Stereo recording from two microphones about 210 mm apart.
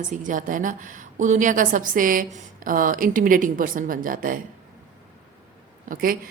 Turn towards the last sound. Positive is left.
turn(degrees=-40)  # may be behind; listen again after turning